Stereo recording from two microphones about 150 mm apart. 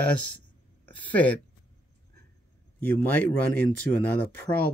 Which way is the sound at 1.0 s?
10° left (ahead or behind).